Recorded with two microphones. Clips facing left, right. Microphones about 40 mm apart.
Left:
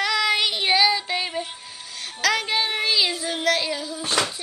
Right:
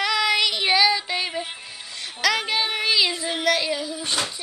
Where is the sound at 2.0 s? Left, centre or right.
Centre.